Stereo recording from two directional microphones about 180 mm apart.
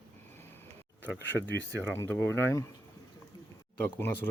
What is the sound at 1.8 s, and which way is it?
Speech, 10° left (ahead or behind).